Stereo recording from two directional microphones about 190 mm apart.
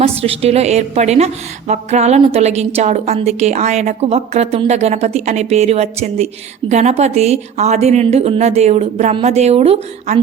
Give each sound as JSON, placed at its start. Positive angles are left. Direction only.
{"t": 0.0, "sound": "a woman's voice", "side_deg": -35}